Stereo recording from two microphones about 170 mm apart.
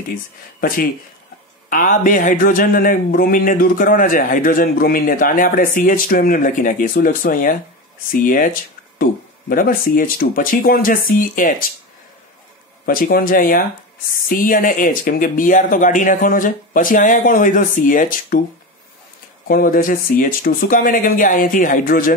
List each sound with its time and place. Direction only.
0.6 s a man's voice: 55° left (ahead or behind)
12.8 s a man's voice: 55° left (ahead or behind)
19.4 s speech: 55° left (ahead or behind)